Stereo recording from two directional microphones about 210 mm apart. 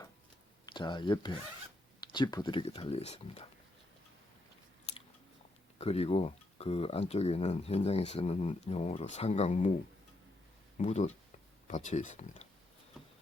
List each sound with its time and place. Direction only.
0.6 s speech: 20° left (ahead or behind)
5.8 s speech: 30° left (ahead or behind)
10.8 s speech: 30° left (ahead or behind)